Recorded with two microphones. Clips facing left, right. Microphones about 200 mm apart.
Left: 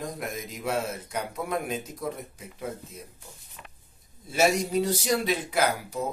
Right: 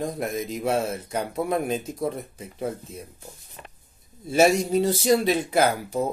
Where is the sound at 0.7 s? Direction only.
30° right (ahead or behind).